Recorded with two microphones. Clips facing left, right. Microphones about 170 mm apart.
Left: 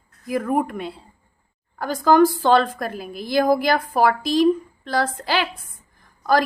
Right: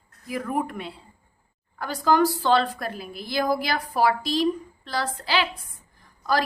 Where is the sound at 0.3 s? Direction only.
50° left (ahead or behind).